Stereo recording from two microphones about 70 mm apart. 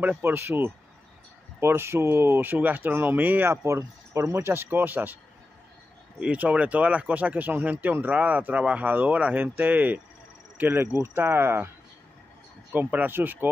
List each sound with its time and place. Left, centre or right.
0.2 s speech: right
3.6 s speech: right
12.7 s speech: right